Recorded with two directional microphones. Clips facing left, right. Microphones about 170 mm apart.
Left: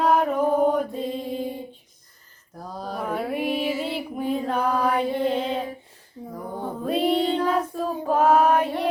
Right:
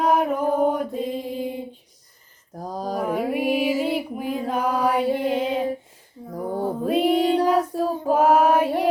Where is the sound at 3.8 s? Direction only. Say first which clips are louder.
Right 2 dB; 10° right (ahead or behind).